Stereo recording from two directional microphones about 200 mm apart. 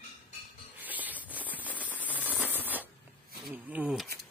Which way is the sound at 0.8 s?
10° right (ahead or behind).